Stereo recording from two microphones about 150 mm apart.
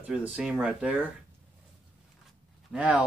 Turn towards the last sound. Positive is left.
turn(degrees=-10)  # may be behind; listen again after turning